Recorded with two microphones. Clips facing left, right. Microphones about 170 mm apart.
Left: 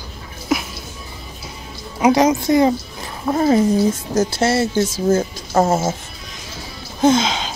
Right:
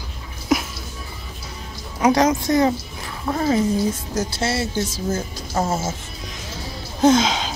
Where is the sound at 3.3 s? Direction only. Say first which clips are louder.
Left 5 dB; 40° left (ahead or behind).